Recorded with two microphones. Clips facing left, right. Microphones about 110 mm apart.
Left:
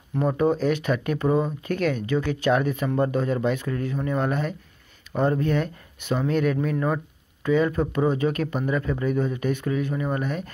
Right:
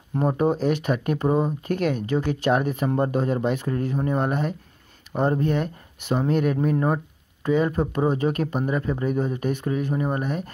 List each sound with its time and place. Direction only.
0.1 s speech: 35° right (ahead or behind)
6.1 s speech: 35° right (ahead or behind)